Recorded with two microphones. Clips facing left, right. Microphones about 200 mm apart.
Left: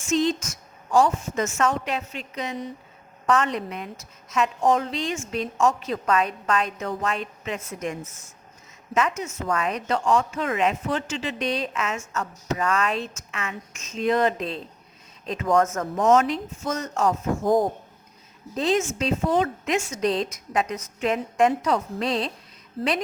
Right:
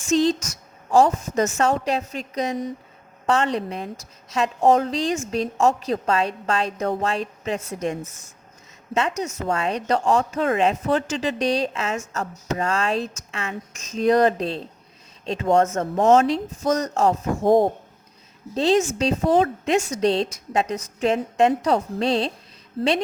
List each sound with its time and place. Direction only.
0.1 s speech: 35° right (ahead or behind)
3.2 s a woman's voice: 30° right (ahead or behind)